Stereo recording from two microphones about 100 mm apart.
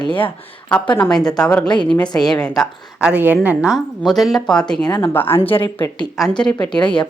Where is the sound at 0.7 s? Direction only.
15° left (ahead or behind).